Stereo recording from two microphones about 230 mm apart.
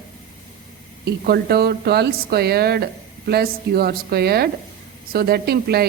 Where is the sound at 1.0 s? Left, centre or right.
Right.